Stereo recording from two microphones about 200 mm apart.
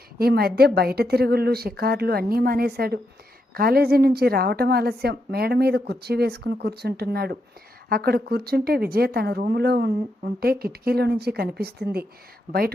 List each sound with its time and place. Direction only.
0.2 s a woman's voice: 50° right (ahead or behind)